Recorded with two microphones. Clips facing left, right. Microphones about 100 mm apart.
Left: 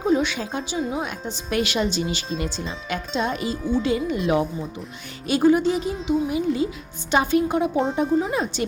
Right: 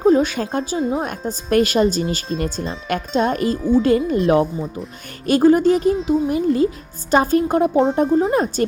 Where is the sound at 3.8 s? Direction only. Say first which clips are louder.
Right 6 dB; 50° right (ahead or behind).